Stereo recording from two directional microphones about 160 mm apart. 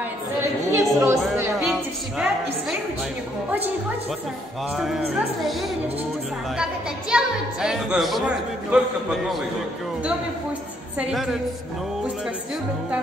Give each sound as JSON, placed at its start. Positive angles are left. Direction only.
{"t": 0.4, "sound": "a sound", "side_deg": -15}
{"t": 1.6, "sound": "music", "side_deg": -5}
{"t": 6.6, "sound": "a woman's voice", "side_deg": -5}
{"t": 11.0, "sound": "a woman's voice", "side_deg": -5}